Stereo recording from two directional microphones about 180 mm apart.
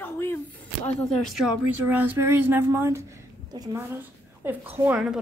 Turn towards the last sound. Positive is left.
turn(degrees=-10)  # may be behind; listen again after turning